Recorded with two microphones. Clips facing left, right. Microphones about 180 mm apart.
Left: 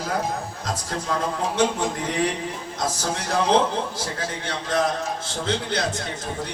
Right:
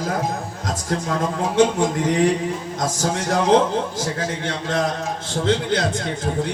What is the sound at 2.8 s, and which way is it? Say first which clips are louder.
A man's voice: right 3 dB; 45° right (ahead or behind).